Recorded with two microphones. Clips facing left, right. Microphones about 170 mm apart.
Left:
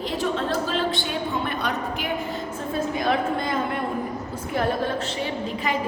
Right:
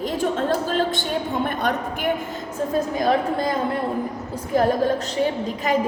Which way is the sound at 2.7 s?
40° right (ahead or behind).